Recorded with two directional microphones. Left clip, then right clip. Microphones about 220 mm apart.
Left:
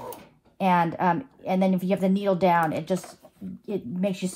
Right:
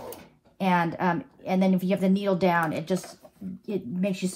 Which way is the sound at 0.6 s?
30° left (ahead or behind).